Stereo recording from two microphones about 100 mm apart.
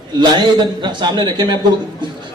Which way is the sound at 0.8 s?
50° right (ahead or behind).